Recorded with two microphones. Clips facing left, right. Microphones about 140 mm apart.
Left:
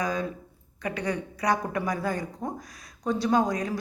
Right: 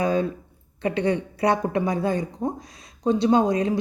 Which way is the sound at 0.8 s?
25° right (ahead or behind).